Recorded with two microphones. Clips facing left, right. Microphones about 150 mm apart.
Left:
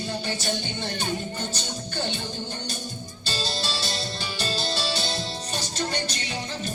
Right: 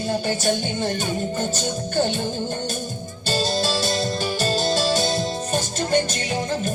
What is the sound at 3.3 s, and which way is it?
Music, 45° right (ahead or behind).